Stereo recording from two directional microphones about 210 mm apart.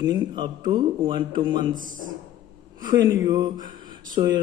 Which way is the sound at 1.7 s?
40° right (ahead or behind).